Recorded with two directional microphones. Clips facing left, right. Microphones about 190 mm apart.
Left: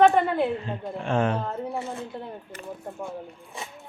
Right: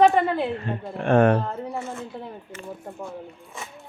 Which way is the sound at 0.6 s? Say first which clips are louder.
Right 3 dB; 60° right (ahead or behind).